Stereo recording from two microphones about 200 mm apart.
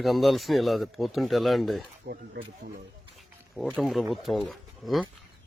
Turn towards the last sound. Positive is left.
turn(degrees=0)  # may be behind; listen again after turning